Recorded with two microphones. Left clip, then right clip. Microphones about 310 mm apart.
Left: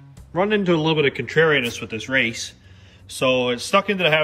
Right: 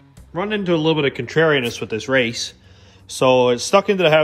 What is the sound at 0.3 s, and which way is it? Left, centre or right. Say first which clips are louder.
Speech: left 1 dB; centre.